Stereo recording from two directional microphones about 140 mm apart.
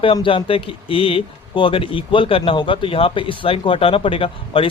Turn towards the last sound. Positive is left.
turn(degrees=40)  # may be behind; listen again after turning